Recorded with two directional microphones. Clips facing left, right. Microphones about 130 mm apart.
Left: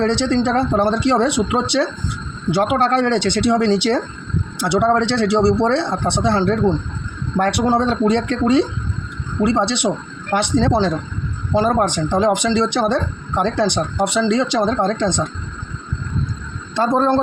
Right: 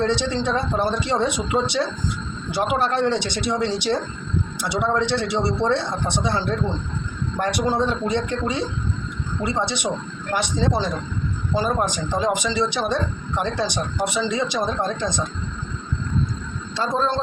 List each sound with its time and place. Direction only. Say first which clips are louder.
0.0 s speech: left 5 dB; 65° left (ahead or behind)
16.7 s a man's voice: left 7 dB; 55° left (ahead or behind)